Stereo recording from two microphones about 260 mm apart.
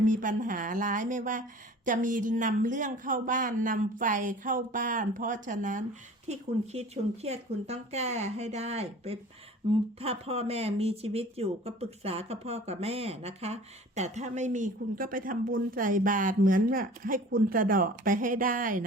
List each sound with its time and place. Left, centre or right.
0.0 s a woman's voice: right